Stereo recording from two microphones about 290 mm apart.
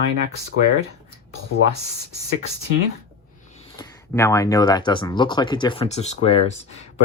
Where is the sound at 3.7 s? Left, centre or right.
Centre.